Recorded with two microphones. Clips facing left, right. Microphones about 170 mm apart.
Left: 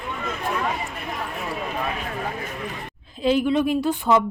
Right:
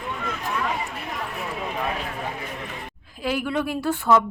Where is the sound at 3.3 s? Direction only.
20° left (ahead or behind).